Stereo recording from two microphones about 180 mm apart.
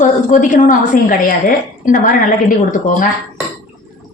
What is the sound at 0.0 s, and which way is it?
A woman's voice, 45° left (ahead or behind).